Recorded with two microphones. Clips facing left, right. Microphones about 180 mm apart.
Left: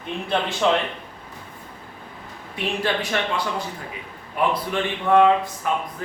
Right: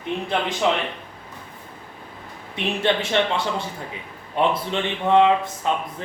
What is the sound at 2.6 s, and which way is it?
A man's voice, 25° right (ahead or behind).